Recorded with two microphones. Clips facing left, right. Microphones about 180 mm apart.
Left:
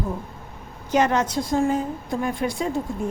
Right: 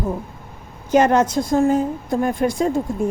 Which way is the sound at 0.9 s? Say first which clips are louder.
Right 5 dB; 50° right (ahead or behind).